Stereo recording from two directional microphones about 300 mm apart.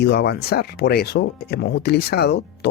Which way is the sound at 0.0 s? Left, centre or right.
Left.